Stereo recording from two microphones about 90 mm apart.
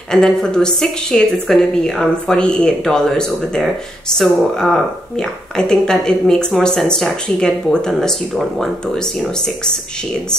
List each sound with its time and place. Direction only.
0.1 s speech: 5° left (ahead or behind)